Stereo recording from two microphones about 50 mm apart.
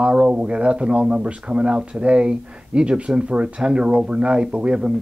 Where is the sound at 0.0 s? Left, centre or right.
Right.